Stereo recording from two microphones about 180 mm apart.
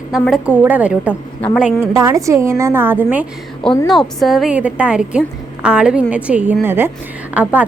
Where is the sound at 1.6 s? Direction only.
10° right (ahead or behind).